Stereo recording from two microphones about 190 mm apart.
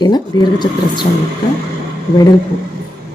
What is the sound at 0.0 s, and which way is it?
Speech, 20° left (ahead or behind).